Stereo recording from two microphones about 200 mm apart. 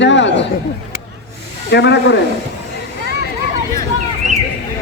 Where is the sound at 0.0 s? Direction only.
60° left (ahead or behind).